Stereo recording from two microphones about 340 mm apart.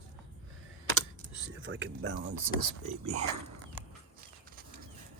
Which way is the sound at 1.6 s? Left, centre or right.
Right.